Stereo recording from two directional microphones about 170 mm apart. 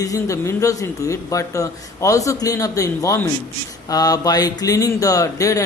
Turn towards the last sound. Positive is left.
turn(degrees=20)  # may be behind; listen again after turning